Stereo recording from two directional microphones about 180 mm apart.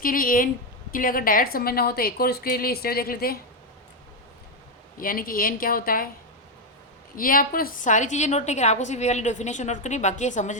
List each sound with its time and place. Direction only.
0.0 s a woman's voice: 50° left (ahead or behind)
4.9 s a woman's voice: 55° left (ahead or behind)
7.2 s a woman's voice: 50° left (ahead or behind)